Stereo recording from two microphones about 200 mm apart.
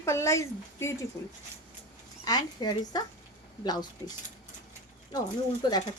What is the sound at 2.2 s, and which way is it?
Speech, 20° left (ahead or behind).